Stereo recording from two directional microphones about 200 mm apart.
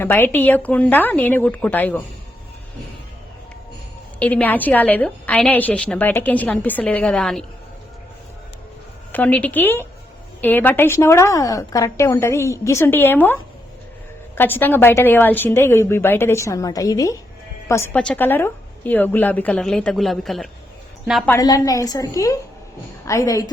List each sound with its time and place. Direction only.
0.0 s a woman's voice: 10° left (ahead or behind)
4.2 s a woman's voice: 5° left (ahead or behind)
9.1 s a woman's voice: 10° left (ahead or behind)
21.2 s a woman's voice: 15° left (ahead or behind)